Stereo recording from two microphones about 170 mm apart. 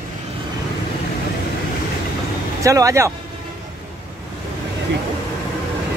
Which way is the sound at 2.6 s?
20° right (ahead or behind).